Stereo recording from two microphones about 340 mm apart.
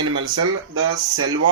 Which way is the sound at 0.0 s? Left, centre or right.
Right.